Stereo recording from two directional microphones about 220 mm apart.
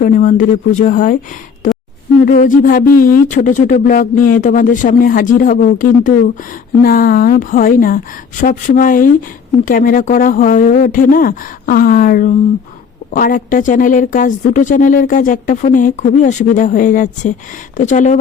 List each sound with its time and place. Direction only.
0.0 s a woman's voice: 35° left (ahead or behind)
2.2 s a woman's voice: 35° left (ahead or behind)